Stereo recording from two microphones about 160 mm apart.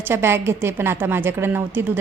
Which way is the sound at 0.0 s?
15° right (ahead or behind).